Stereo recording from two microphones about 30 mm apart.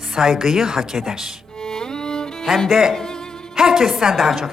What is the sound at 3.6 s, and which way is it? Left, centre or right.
Speech, centre.